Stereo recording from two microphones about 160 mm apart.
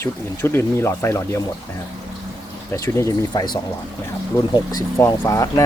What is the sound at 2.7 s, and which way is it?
Speech, 20° left (ahead or behind).